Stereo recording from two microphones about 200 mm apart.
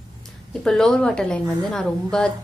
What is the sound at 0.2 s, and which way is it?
A woman's voice, centre (ahead or behind).